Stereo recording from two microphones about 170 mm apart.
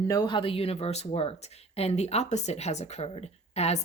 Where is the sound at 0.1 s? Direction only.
25° left (ahead or behind).